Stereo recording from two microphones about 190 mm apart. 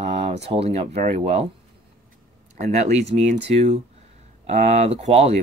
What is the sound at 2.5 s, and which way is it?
Speech, 40° right (ahead or behind).